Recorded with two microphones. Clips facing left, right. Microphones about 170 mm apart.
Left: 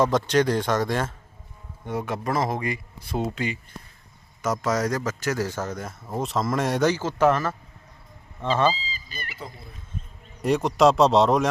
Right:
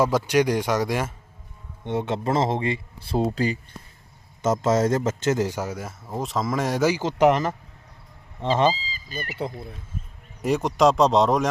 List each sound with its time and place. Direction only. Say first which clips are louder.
0.0 s speech: even; 10° right (ahead or behind)
1.8 s speech: right 3 dB; 25° right (ahead or behind)
4.4 s speech: right 4 dB; 25° right (ahead or behind)
8.7 s honk: right 3 dB; 40° right (ahead or behind)
10.4 s speech: left 1 dB; centre (ahead or behind)